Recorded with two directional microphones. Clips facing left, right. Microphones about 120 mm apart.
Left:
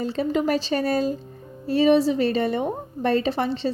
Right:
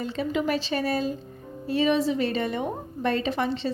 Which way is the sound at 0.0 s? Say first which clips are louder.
Left 4 dB; 40° left (ahead or behind).